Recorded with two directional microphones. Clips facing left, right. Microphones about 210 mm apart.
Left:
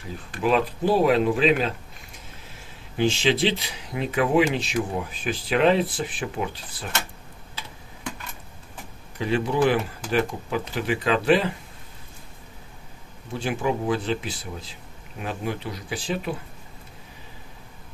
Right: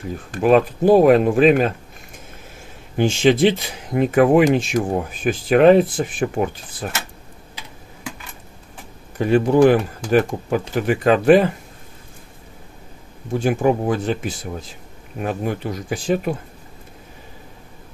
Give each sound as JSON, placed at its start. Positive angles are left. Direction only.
{"t": 0.3, "sound": "speech", "side_deg": -50}
{"t": 3.0, "sound": "speech", "side_deg": -50}
{"t": 9.2, "sound": "speech", "side_deg": -45}
{"t": 13.3, "sound": "speech", "side_deg": -45}